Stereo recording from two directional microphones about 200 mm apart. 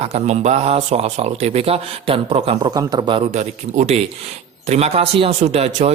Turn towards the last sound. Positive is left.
turn(degrees=-30)  # may be behind; listen again after turning